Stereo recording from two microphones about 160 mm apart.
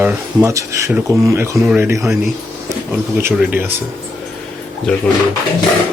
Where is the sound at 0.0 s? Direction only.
20° right (ahead or behind).